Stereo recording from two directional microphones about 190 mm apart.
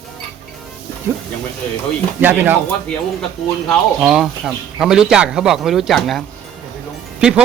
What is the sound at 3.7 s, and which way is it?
A man's voice, centre (ahead or behind).